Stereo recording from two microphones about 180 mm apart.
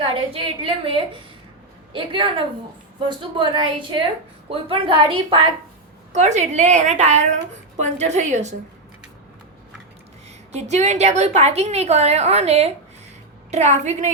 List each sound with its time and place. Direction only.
0.0 s a woman's voice: 30° right (ahead or behind)
6.1 s a woman's voice: 40° right (ahead or behind)
10.5 s a woman's voice: 40° right (ahead or behind)